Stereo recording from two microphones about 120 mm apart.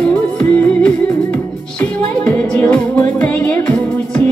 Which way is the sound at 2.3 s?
15° left (ahead or behind).